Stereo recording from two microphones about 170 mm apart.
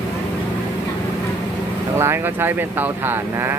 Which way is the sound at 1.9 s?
15° right (ahead or behind).